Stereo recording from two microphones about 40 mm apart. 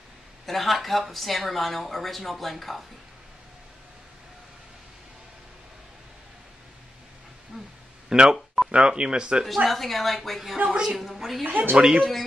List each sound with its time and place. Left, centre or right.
0.5 s speech: centre
7.5 s speech: centre
9.7 s speech: centre
10.7 s speech: centre
11.0 s speech: centre
11.4 s speech: right
11.7 s speech: right